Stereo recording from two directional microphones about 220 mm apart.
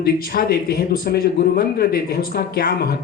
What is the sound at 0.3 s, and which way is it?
Speech, 45° left (ahead or behind).